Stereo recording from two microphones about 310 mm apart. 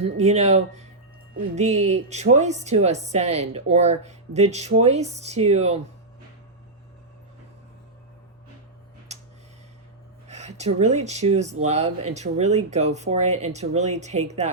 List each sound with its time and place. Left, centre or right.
0.0 s a woman's voice: right
10.2 s a woman's voice: right